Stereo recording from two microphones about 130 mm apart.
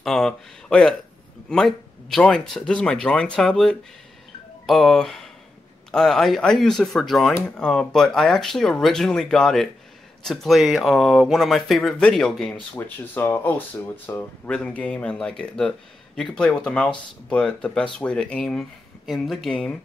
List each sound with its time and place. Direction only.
0.0 s speech: 5° left (ahead or behind)
12.7 s speech: 15° left (ahead or behind)